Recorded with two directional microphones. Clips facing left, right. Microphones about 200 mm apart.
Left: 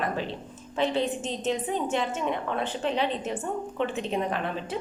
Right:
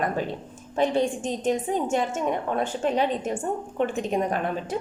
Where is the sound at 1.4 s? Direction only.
45° right (ahead or behind).